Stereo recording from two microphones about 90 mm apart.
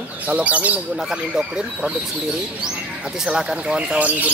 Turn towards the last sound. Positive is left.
turn(degrees=-15)  # may be behind; listen again after turning